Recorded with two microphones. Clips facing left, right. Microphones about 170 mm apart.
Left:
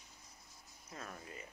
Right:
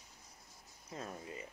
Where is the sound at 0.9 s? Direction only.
25° right (ahead or behind).